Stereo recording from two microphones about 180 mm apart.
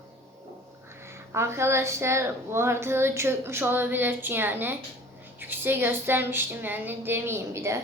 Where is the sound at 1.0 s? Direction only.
15° right (ahead or behind).